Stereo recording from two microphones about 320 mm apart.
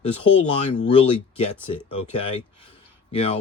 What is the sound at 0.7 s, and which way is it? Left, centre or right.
Speech, centre.